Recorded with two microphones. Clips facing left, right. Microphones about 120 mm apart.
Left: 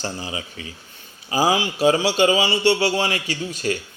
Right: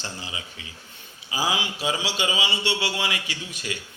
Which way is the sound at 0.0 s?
40° left (ahead or behind).